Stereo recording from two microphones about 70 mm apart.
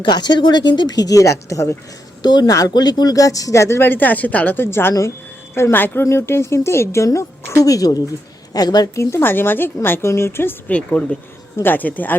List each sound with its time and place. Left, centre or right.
0.1 s speech: left
2.2 s speech: left
3.8 s a woman's voice: left
7.6 s speech: left
8.5 s speech: left
9.0 s speech: left
9.2 s speech: left
10.7 s a woman's voice: left